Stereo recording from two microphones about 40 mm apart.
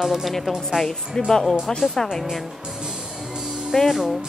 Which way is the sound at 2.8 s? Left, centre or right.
Centre.